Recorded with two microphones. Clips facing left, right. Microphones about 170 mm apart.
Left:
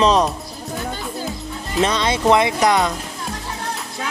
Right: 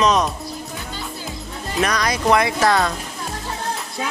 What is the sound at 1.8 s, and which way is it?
Speech, 25° left (ahead or behind).